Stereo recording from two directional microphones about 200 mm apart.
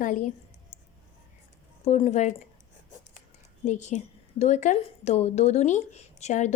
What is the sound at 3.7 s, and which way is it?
Speech, 35° left (ahead or behind).